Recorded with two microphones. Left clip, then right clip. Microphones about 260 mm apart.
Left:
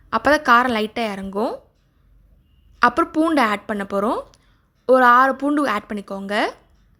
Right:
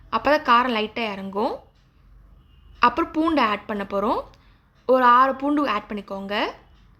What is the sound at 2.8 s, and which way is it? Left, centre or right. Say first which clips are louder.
A woman's voice: left 3 dB; left.